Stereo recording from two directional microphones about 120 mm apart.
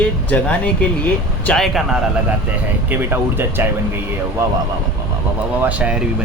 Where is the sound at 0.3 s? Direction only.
10° left (ahead or behind).